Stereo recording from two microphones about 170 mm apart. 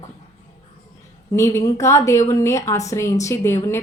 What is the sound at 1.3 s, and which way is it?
A woman's voice, 15° left (ahead or behind).